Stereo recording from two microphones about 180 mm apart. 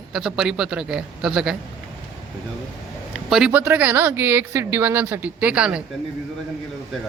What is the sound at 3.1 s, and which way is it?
Speech, 5° right (ahead or behind).